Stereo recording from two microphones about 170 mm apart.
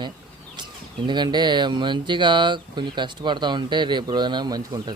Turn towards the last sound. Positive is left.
turn(degrees=-25)  # may be behind; listen again after turning